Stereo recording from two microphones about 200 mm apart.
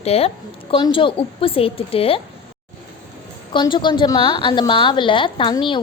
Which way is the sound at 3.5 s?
25° left (ahead or behind).